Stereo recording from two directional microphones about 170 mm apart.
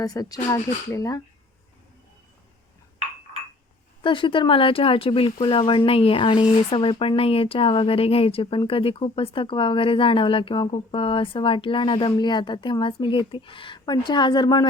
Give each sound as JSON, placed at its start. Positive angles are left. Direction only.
{"t": 0.0, "sound": "speech", "side_deg": 20}
{"t": 4.0, "sound": "speech", "side_deg": 30}